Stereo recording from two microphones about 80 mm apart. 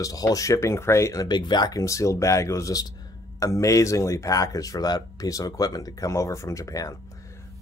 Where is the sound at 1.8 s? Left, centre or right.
Left.